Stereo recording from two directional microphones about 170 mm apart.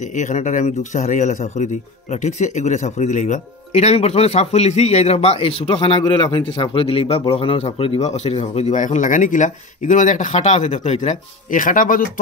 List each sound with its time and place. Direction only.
0.0 s speech: 45° left (ahead or behind)